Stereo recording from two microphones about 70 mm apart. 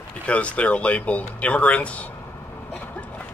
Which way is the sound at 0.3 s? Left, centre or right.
Centre.